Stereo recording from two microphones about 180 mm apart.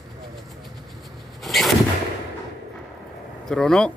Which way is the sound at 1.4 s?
Centre (ahead or behind).